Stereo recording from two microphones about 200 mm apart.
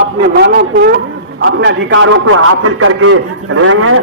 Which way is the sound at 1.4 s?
70° right (ahead or behind).